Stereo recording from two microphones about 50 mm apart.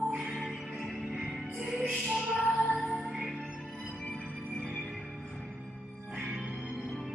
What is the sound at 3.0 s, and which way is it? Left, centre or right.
Music, centre.